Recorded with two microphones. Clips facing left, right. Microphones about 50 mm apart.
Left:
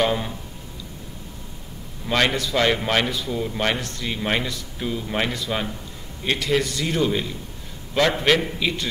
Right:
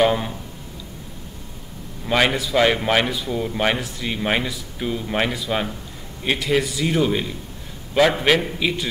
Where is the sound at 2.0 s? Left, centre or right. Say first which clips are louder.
Right 2 dB; centre.